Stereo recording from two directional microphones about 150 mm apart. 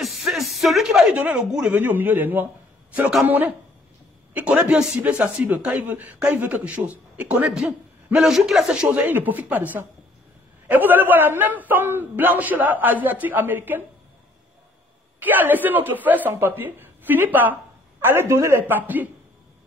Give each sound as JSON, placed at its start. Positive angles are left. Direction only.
{"t": 0.0, "sound": "a sound", "side_deg": 0}
{"t": 1.7, "sound": "a man's voice", "side_deg": -10}
{"t": 15.1, "sound": "speech", "side_deg": -10}